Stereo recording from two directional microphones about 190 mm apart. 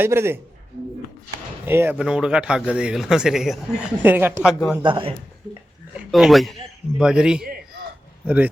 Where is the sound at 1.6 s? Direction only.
10° right (ahead or behind).